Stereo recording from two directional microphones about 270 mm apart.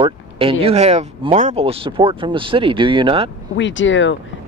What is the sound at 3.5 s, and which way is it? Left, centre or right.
Speech, left.